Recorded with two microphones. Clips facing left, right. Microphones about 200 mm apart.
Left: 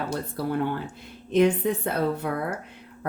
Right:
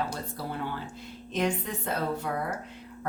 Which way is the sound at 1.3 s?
60° left (ahead or behind).